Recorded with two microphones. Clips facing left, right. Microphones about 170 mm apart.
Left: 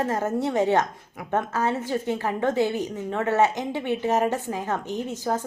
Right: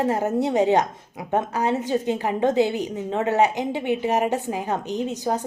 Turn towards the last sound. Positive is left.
turn(degrees=-20)  # may be behind; listen again after turning